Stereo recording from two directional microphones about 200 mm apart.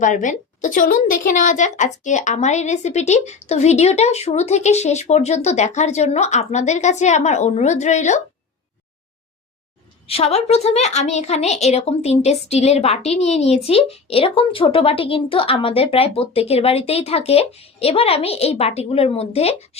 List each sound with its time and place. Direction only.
0.0 s a woman's voice: 40° left (ahead or behind)
10.1 s a woman's voice: 30° left (ahead or behind)